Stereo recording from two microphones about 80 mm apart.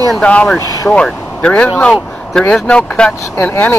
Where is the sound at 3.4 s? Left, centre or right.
Left.